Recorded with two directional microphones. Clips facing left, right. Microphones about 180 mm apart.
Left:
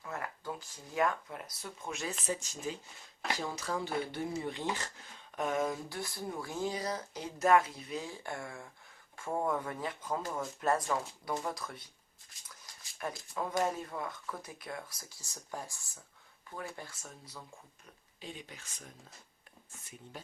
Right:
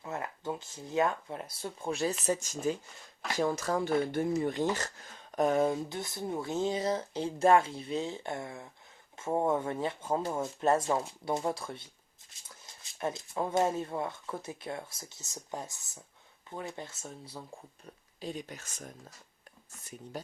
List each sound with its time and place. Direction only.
0.0 s speech: 25° right (ahead or behind)
2.2 s speech: 45° right (ahead or behind); by 11.9 s 30° right (ahead or behind)
13.0 s speech: 25° right (ahead or behind)
18.2 s speech: 40° right (ahead or behind)
20.1 s speech: 40° right (ahead or behind)